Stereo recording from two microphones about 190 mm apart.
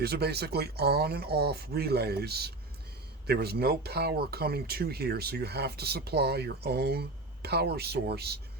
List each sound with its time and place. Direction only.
0.0 s speech: 60° right (ahead or behind)